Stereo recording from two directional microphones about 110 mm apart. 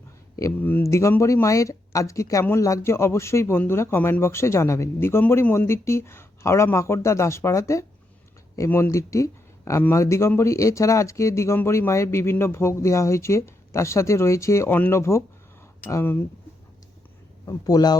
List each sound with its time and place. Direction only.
0.6 s speech: 20° left (ahead or behind)
17.4 s a man's voice: 35° left (ahead or behind)